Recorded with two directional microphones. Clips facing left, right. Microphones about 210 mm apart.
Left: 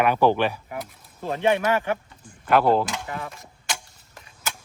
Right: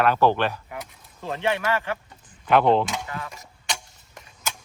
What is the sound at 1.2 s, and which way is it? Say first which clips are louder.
Speech: left 4 dB; 15° left (ahead or behind).